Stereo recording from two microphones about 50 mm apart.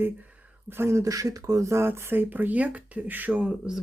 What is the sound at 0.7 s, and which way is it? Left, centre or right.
Speech, right.